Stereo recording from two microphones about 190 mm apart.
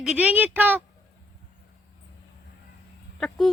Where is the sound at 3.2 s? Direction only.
Centre (ahead or behind).